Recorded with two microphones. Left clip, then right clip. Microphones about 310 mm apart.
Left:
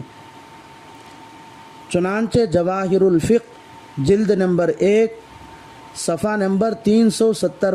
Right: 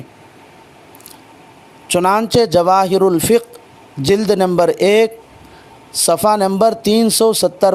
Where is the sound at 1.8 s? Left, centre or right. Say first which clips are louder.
Right 7 dB; centre.